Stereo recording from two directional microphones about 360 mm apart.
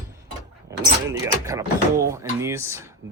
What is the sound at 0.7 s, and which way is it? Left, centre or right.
Vehicle, centre.